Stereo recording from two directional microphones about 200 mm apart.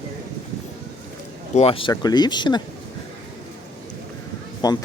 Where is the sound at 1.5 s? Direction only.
30° left (ahead or behind).